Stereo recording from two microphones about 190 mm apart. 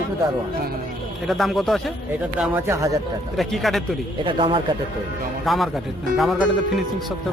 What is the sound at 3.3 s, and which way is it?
Speech, centre (ahead or behind).